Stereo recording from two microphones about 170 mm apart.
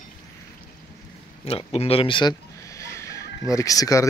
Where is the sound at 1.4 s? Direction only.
35° left (ahead or behind); by 4.0 s 20° left (ahead or behind).